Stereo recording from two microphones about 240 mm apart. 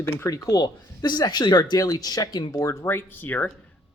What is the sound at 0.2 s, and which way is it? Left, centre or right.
Speech, centre.